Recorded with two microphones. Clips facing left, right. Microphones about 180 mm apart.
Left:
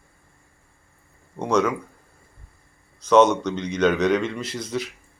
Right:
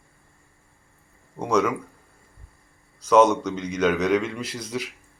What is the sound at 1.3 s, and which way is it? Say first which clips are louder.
Speech: left 1 dB; 5° right (ahead or behind).